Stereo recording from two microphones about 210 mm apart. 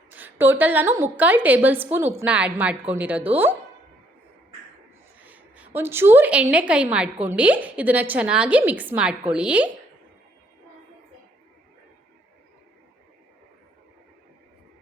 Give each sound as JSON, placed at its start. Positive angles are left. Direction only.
{"t": 0.1, "sound": "a woman's voice", "side_deg": -10}
{"t": 5.2, "sound": "a woman's voice", "side_deg": -5}